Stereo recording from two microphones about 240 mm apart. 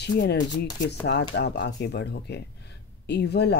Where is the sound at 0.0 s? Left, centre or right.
Left.